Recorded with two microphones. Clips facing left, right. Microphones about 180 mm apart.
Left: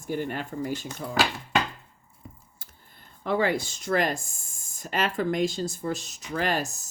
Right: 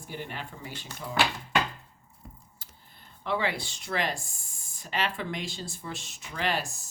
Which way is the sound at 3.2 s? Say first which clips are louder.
Left 5 dB; 45° left (ahead or behind).